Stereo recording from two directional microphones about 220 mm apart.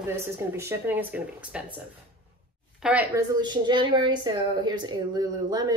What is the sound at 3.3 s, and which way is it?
A woman's voice, 20° right (ahead or behind).